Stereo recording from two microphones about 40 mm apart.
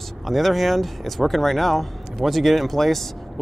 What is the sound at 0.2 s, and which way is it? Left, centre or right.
Speech, centre.